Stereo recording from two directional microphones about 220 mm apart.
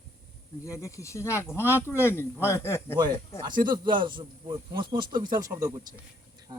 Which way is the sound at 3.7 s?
20° right (ahead or behind).